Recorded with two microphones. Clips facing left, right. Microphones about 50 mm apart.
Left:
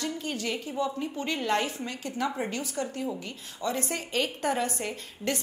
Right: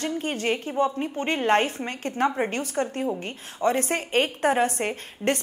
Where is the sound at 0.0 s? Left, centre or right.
Right.